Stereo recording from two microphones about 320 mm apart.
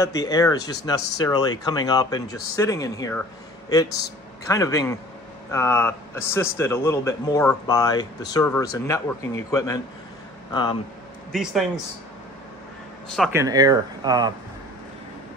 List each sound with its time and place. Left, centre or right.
0.0 s a man's voice: centre
4.5 s a man's voice: centre
13.1 s speech: centre